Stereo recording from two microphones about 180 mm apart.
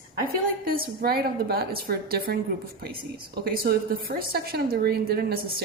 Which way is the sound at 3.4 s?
55° right (ahead or behind).